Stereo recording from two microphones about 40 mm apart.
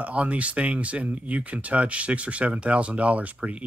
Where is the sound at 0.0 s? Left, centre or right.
Right.